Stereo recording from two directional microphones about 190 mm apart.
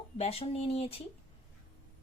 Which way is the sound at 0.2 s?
30° left (ahead or behind).